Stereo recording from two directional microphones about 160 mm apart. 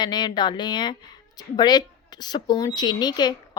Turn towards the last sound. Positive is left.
turn(degrees=25)  # may be behind; listen again after turning